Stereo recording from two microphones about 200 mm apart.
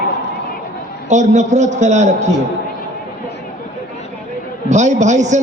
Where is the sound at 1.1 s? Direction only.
35° right (ahead or behind).